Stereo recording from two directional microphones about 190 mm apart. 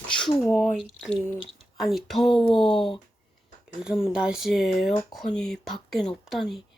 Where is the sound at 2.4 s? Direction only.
25° left (ahead or behind).